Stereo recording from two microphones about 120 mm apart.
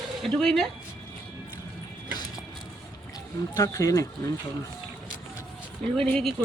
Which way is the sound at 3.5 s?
30° left (ahead or behind).